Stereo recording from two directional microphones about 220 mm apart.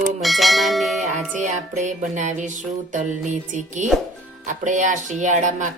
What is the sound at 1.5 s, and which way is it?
Music, 35° right (ahead or behind).